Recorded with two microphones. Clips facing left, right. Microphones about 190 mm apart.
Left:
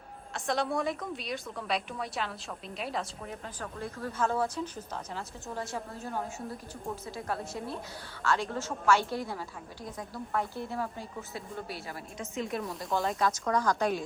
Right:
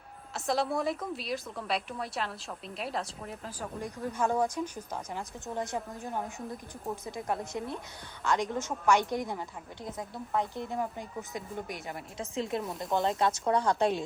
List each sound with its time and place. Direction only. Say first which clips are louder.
0.3 s a woman's voice: right 1 dB; centre (ahead or behind)
3.6 s a woman's voice: right 2 dB; 15° right (ahead or behind)
12.2 s speech: right 1 dB; 30° right (ahead or behind)